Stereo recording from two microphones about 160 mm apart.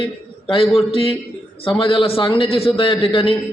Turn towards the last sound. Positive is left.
turn(degrees=35)  # may be behind; listen again after turning